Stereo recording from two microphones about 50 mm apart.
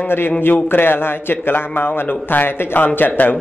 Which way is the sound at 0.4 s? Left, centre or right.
Left.